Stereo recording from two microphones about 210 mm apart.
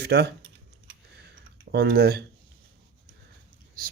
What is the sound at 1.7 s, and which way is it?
Speech, 50° right (ahead or behind).